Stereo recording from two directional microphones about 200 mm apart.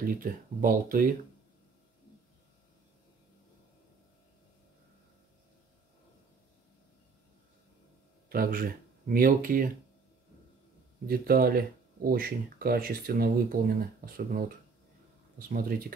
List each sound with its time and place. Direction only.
0.0 s speech: 45° right (ahead or behind)
8.3 s speech: 45° right (ahead or behind)
11.1 s speech: 45° right (ahead or behind)